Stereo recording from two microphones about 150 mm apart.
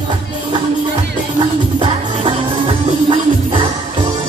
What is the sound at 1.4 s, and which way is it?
Music, 35° right (ahead or behind).